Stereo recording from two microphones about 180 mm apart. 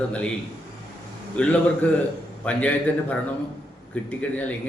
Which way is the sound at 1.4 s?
10° left (ahead or behind).